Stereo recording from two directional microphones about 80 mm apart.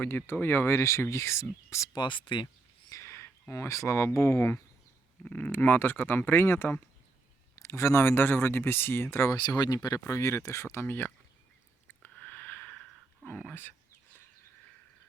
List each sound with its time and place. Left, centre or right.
0.0 s speech: left
1.9 s speech: left
2.9 s a sound: left
3.5 s speech: left
5.2 s speech: left
9.3 s speech: left
11.9 s a sound: centre
13.2 s speech: centre
13.5 s speech: left